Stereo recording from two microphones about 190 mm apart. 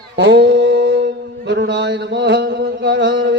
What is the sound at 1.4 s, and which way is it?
Speech, 65° right (ahead or behind).